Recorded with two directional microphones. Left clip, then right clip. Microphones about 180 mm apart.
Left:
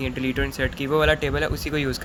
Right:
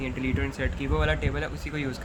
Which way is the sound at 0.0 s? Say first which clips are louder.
Left 5 dB; 35° left (ahead or behind).